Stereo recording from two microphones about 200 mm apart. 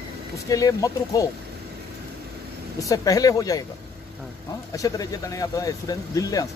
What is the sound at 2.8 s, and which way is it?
Speech, 15° left (ahead or behind).